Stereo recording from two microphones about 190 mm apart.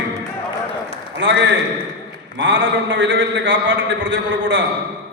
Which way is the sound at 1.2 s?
75° right (ahead or behind).